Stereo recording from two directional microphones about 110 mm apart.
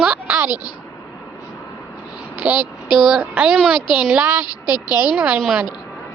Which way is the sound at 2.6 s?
45° left (ahead or behind).